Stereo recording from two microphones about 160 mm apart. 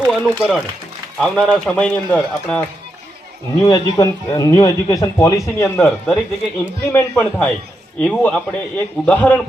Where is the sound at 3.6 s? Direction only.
25° left (ahead or behind).